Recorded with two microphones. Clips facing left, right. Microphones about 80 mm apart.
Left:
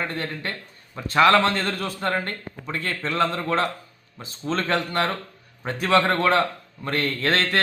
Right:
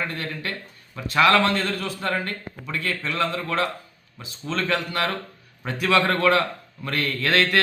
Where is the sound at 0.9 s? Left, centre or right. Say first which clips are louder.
Left 1 dB; left.